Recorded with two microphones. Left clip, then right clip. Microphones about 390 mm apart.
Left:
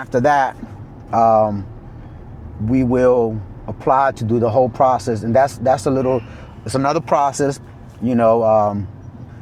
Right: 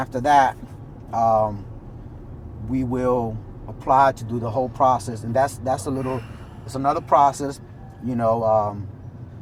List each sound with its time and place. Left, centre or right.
0.0 s speech: left
2.7 s speech: left